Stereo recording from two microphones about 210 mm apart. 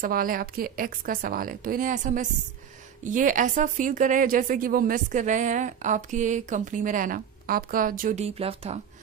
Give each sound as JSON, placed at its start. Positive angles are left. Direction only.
{"t": 0.0, "sound": "a woman's voice", "side_deg": -40}
{"t": 8.4, "sound": "speech", "side_deg": -30}